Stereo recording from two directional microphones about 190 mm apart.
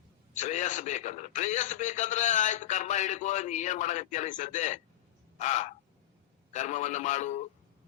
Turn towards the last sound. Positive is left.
turn(degrees=40)  # may be behind; listen again after turning